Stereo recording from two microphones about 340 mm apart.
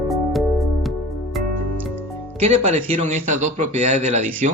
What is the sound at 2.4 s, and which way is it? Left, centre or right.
Speech, centre.